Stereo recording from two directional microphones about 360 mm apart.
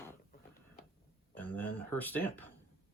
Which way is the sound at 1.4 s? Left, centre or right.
Centre.